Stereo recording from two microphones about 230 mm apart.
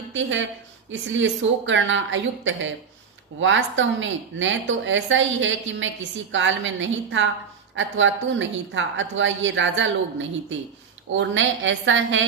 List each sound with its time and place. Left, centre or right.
0.1 s a woman's voice: right